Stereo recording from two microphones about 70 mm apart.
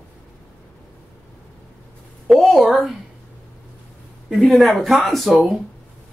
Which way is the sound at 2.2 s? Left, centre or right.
Centre.